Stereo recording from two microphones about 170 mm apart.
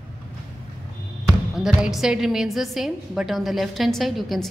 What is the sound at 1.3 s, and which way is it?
A woman's voice, 5° right (ahead or behind).